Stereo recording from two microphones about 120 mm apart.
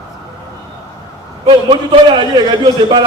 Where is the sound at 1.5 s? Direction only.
45° right (ahead or behind).